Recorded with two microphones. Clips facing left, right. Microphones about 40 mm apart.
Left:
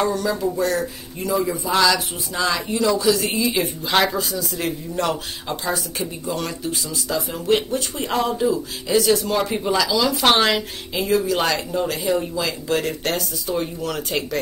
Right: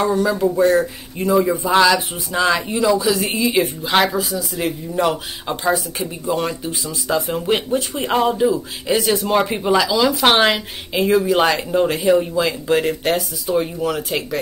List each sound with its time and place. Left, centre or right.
0.0 s speech: centre
7.2 s speech: right
7.4 s speech: centre
12.0 s speech: centre
13.0 s speech: centre